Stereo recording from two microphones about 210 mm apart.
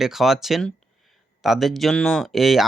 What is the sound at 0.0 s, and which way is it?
Speech, centre (ahead or behind).